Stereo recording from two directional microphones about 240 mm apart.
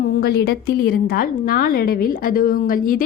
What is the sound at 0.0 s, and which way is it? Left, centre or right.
A woman's voice, left.